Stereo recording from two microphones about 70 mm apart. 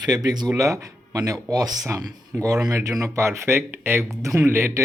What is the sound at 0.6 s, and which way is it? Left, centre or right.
Speech, right.